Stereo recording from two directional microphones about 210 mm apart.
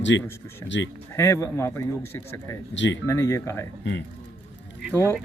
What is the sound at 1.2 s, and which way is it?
Speech, 15° left (ahead or behind).